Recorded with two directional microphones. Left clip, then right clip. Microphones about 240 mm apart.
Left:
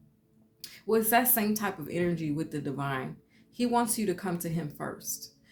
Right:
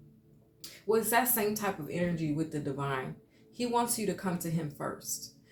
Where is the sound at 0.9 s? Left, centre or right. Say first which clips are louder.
Left 2 dB; left.